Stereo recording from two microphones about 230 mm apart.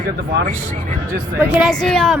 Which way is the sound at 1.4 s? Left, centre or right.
Centre.